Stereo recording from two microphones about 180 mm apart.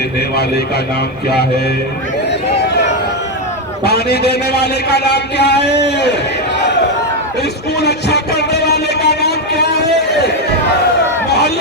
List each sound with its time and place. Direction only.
1.3 s a man's voice: 65° left (ahead or behind)
3.8 s a man's voice: 65° left (ahead or behind)
7.8 s a sound: 65° left (ahead or behind)